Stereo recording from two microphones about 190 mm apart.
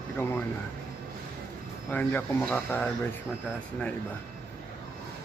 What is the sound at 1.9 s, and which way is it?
Speech, 10° left (ahead or behind).